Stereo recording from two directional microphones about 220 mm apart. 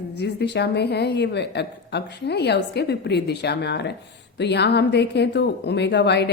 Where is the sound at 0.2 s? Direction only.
50° left (ahead or behind).